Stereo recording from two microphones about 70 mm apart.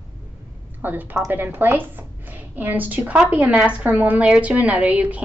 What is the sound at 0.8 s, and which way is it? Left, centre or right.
A woman's voice, right.